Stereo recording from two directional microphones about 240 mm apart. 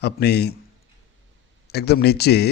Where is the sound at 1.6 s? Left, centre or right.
Left.